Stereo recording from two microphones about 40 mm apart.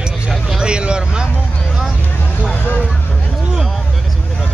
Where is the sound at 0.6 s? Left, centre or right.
Right.